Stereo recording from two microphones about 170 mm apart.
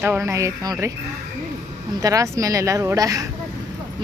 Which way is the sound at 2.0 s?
20° right (ahead or behind).